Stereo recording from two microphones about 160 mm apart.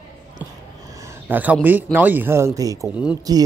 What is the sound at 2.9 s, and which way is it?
Speech, 5° right (ahead or behind).